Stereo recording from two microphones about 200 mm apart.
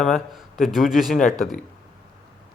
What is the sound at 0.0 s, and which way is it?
Speech, centre (ahead or behind).